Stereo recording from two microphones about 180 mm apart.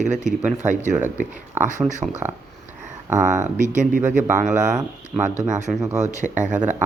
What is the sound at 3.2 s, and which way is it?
Speech, 45° right (ahead or behind).